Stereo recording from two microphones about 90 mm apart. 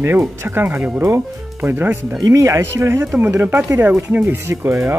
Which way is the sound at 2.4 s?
35° right (ahead or behind).